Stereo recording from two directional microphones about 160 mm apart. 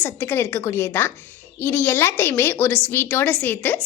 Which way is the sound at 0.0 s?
15° left (ahead or behind).